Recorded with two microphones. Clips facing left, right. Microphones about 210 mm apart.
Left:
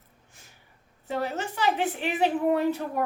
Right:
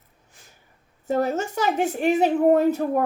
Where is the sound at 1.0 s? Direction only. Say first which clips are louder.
Right 7 dB; 45° right (ahead or behind).